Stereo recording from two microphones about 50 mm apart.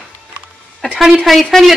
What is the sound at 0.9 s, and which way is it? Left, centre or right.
Speech, centre.